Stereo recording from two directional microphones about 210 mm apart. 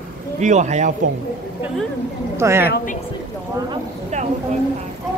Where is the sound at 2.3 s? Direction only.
10° right (ahead or behind).